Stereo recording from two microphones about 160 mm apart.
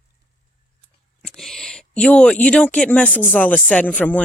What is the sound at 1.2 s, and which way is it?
Speech, 5° left (ahead or behind).